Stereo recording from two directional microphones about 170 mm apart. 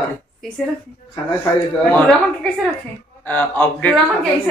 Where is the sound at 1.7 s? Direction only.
5° left (ahead or behind).